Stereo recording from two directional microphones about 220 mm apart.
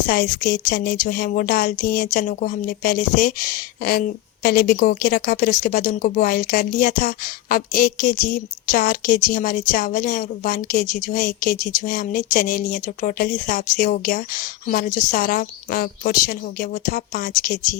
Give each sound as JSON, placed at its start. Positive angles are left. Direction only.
{"t": 0.0, "sound": "a woman's voice", "side_deg": 40}